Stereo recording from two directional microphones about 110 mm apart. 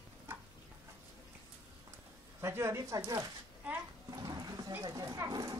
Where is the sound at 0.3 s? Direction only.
20° right (ahead or behind).